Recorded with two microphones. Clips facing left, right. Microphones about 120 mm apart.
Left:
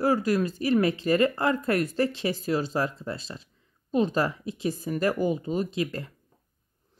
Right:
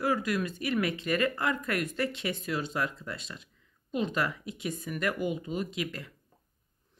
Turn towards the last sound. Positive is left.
turn(degrees=35)  # may be behind; listen again after turning